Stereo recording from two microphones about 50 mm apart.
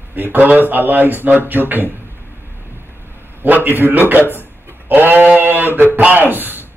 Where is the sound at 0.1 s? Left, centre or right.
Right.